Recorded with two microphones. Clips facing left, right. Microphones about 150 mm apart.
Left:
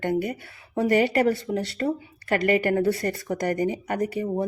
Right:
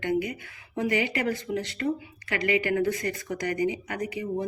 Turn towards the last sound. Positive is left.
turn(degrees=50)  # may be behind; listen again after turning